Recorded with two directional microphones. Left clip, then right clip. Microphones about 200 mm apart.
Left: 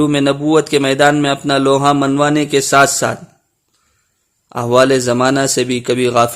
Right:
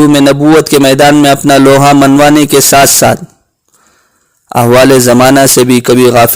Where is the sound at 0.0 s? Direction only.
35° right (ahead or behind).